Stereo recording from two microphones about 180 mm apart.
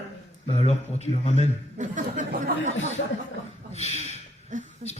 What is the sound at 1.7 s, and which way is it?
Speech, 45° right (ahead or behind).